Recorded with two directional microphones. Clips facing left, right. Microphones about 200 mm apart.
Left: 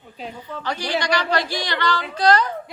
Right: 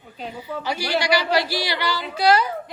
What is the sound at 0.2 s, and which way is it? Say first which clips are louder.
A woman's voice: right 2 dB; 5° right (ahead or behind).